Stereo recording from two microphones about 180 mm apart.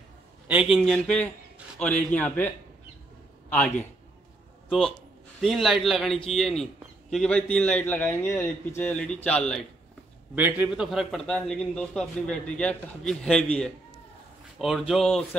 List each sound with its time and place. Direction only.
0.5 s a man's voice: centre (ahead or behind)
10.3 s a man's voice: 10° right (ahead or behind)